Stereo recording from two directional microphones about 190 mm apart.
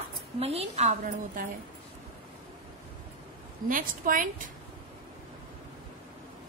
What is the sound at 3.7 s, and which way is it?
Speech, 45° right (ahead or behind).